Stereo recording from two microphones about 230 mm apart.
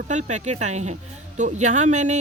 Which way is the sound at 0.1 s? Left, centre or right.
Right.